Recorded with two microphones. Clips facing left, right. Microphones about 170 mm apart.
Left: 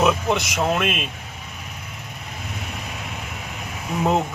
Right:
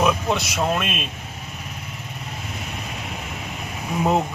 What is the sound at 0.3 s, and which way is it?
Speech, 20° left (ahead or behind).